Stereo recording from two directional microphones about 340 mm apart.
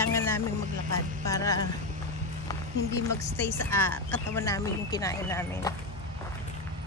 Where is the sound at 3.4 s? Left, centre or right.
Centre.